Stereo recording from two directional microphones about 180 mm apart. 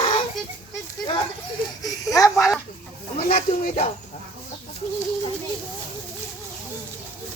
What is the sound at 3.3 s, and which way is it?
Speech, 45° left (ahead or behind).